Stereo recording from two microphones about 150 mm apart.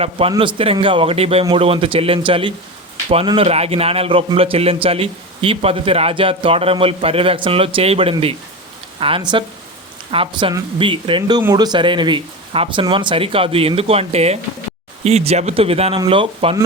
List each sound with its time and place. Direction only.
0.0 s a man's voice: 40° right (ahead or behind)